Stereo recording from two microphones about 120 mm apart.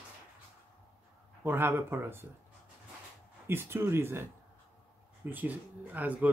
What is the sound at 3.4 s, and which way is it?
Speech, 20° right (ahead or behind).